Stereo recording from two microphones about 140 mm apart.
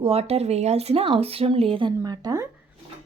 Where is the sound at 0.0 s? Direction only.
45° right (ahead or behind).